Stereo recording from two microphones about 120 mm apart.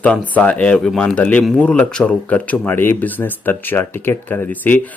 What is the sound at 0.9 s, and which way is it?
Speech, centre (ahead or behind).